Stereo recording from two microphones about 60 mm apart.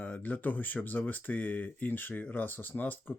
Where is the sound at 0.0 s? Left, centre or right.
Left.